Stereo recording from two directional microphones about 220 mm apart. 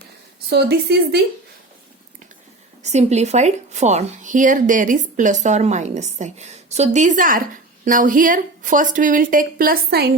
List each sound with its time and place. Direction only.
0.5 s a woman's voice: 45° right (ahead or behind)
2.8 s a woman's voice: 30° right (ahead or behind)